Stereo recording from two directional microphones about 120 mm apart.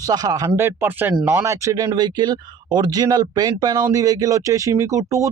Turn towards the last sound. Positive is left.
turn(degrees=-25)  # may be behind; listen again after turning